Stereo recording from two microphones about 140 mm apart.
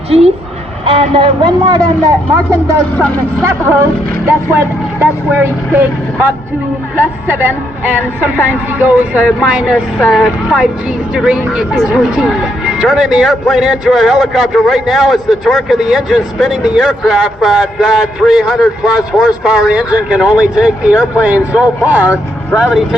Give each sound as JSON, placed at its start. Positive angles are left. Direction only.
{"t": 0.9, "sound": "speech", "side_deg": -40}
{"t": 4.5, "sound": "speech", "side_deg": -15}